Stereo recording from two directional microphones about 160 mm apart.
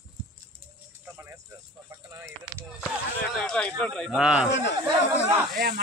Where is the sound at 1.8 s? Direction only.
15° right (ahead or behind).